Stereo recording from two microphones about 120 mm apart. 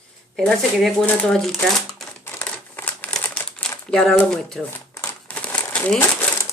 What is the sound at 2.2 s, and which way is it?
Crumpling, 15° left (ahead or behind).